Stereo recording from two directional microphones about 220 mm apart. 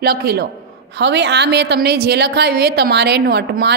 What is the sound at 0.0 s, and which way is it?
A woman's voice, 45° right (ahead or behind).